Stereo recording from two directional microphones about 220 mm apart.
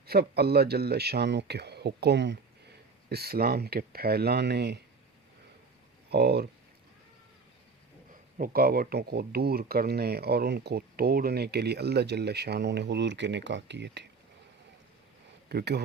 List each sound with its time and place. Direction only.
0.1 s speech: 45° right (ahead or behind)
6.1 s speech: 45° right (ahead or behind)
8.4 s speech: 45° right (ahead or behind)
15.4 s speech: 45° right (ahead or behind)